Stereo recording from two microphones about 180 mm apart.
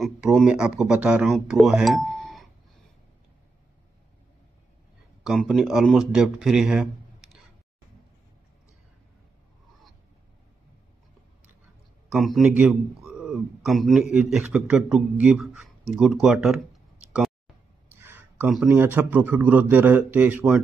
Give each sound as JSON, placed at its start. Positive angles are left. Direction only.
{"t": 0.0, "sound": "speech", "side_deg": 0}
{"t": 5.2, "sound": "speech", "side_deg": 0}
{"t": 12.1, "sound": "a man's voice", "side_deg": 0}
{"t": 17.9, "sound": "a sound", "side_deg": -10}
{"t": 18.5, "sound": "speech", "side_deg": -5}